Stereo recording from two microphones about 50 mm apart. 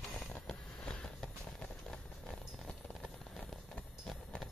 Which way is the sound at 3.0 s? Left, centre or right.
Centre.